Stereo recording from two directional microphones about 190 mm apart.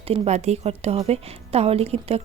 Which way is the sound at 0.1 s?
35° right (ahead or behind).